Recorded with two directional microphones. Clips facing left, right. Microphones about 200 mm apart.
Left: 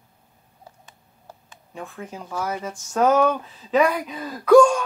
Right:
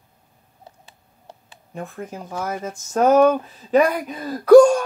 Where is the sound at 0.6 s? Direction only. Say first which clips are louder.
Right 1 dB; 30° right (ahead or behind).